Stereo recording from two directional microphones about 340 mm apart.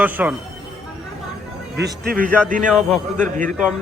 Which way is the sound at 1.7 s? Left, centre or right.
Right.